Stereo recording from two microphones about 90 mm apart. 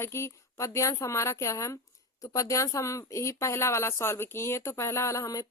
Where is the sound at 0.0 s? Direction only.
30° left (ahead or behind).